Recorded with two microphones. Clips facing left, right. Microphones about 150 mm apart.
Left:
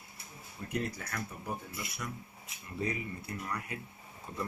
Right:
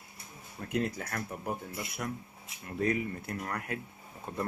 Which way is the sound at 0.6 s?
70° right (ahead or behind).